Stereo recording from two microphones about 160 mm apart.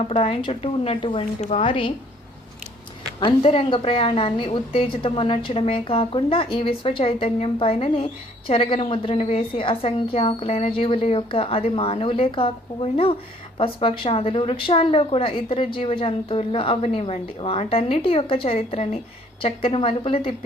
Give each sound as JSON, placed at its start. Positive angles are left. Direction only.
{"t": 0.0, "sound": "a woman's voice", "side_deg": 40}
{"t": 3.2, "sound": "a woman's voice", "side_deg": 35}